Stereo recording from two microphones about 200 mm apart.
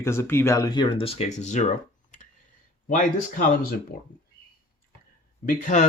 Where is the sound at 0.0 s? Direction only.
10° left (ahead or behind); by 1.7 s 35° left (ahead or behind).